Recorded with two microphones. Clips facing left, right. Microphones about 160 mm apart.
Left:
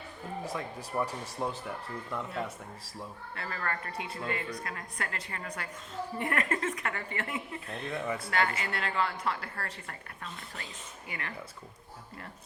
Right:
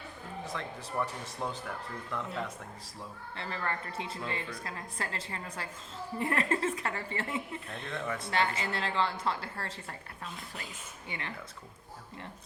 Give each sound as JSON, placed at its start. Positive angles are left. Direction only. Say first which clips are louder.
{"t": 0.4, "sound": "speech", "louder": "even", "side_deg": 10}
{"t": 3.3, "sound": "a woman's voice", "louder": "even", "side_deg": -25}
{"t": 7.9, "sound": "speech", "louder": "left 2 dB", "side_deg": 10}
{"t": 8.3, "sound": "a woman's voice", "louder": "right 1 dB", "side_deg": -25}